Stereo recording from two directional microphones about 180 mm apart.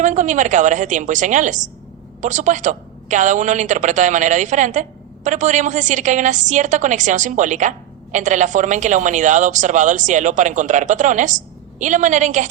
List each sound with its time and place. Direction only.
0.0 s a woman's voice: 45° right (ahead or behind)